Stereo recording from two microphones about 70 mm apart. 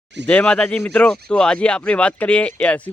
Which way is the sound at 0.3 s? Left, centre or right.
Centre.